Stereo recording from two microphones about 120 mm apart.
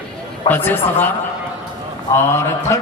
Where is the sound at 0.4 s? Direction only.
15° left (ahead or behind).